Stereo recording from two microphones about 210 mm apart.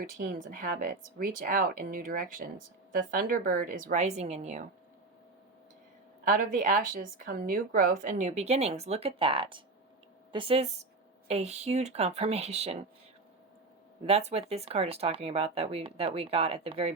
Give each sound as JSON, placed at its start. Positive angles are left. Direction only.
{"t": 0.0, "sound": "speech", "side_deg": -40}
{"t": 6.2, "sound": "speech", "side_deg": -40}
{"t": 14.1, "sound": "speech", "side_deg": -30}